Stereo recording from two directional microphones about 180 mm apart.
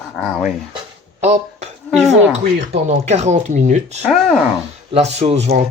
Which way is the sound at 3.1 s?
40° right (ahead or behind).